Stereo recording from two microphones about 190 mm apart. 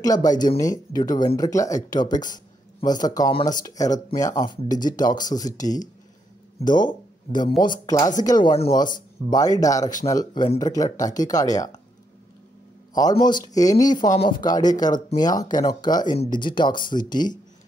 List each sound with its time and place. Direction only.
0.0 s speech: 20° left (ahead or behind)
12.9 s speech: 20° left (ahead or behind)